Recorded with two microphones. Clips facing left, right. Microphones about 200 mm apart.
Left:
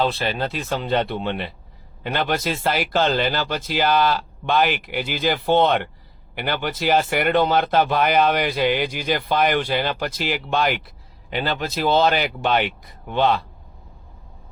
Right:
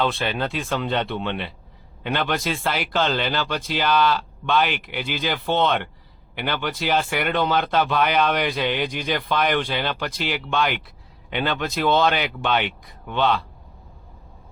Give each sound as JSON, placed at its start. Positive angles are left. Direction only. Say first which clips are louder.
{"t": 0.3, "sound": "speech", "louder": "left 1 dB", "side_deg": 40}
{"t": 8.4, "sound": "speech", "louder": "left 3 dB", "side_deg": 5}
{"t": 9.0, "sound": "speech", "louder": "left 3 dB", "side_deg": 40}